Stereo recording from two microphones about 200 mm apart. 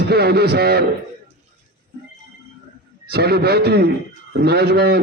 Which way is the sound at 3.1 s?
50° right (ahead or behind).